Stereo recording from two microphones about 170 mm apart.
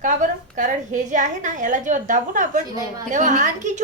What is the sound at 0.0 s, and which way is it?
A woman's voice, 50° right (ahead or behind).